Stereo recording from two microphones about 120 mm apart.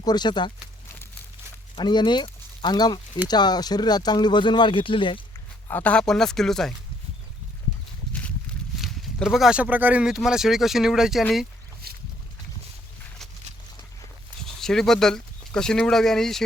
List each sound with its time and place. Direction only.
0.0 s speech: 35° left (ahead or behind)
1.7 s speech: 40° left (ahead or behind)
5.6 s speech: 15° left (ahead or behind)
8.8 s speech: centre (ahead or behind)
14.4 s speech: 5° left (ahead or behind)